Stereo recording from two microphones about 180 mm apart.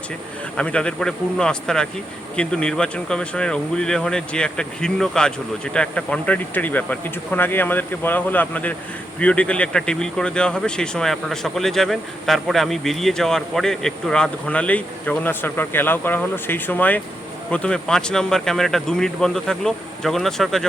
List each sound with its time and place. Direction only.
0.5 s speech: 5° left (ahead or behind)